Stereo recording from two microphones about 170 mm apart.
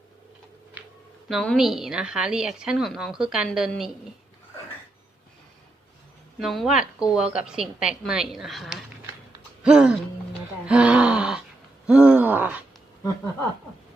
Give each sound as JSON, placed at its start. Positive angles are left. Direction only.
{"t": 1.3, "sound": "a woman's voice", "side_deg": 0}
{"t": 6.4, "sound": "a woman's voice", "side_deg": 0}
{"t": 10.7, "sound": "gasp", "side_deg": -5}
{"t": 11.9, "sound": "a sound", "side_deg": -5}